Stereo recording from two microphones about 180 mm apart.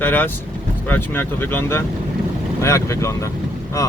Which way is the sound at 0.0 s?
10° left (ahead or behind).